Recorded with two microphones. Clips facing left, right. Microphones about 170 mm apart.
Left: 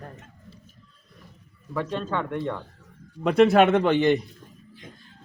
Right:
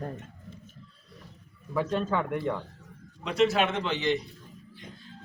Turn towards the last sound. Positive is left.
turn(degrees=55)  # may be behind; listen again after turning